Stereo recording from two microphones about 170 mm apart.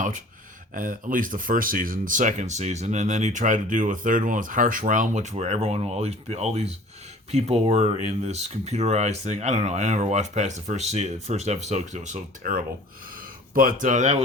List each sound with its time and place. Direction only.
0.7 s speech: 55° right (ahead or behind)